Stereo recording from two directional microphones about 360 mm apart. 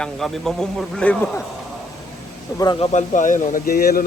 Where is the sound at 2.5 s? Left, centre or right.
Centre.